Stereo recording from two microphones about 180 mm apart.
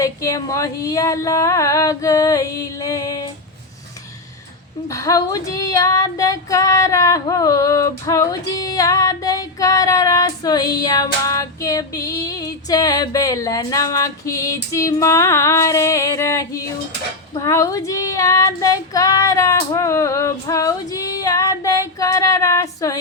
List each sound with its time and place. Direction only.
0.0 s female singing: 20° left (ahead or behind)
4.9 s female singing: 20° left (ahead or behind)